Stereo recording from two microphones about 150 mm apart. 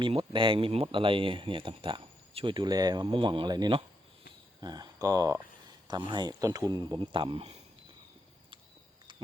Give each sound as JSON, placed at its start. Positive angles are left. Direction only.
{"t": 0.0, "sound": "speech", "side_deg": -35}